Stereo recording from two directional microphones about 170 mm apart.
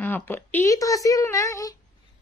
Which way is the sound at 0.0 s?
10° left (ahead or behind).